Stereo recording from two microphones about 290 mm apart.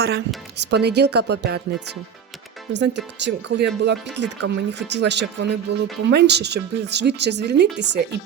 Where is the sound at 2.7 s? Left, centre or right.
Right.